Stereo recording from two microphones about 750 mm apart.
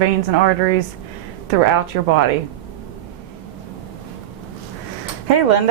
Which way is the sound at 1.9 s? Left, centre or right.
Right.